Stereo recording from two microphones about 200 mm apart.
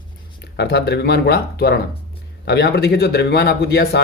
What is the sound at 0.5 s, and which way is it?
Speech, 55° left (ahead or behind).